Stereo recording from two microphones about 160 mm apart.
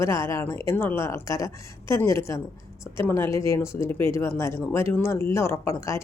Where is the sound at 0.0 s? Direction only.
20° left (ahead or behind).